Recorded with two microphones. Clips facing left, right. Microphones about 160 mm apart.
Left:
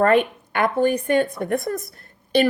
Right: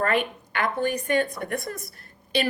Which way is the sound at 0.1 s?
55° left (ahead or behind).